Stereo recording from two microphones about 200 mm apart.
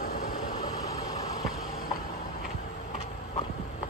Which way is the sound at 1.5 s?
45° left (ahead or behind).